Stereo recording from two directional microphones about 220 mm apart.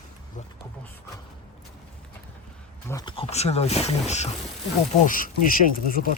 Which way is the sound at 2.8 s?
20° left (ahead or behind).